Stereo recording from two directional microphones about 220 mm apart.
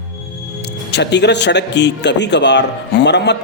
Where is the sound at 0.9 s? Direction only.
50° left (ahead or behind).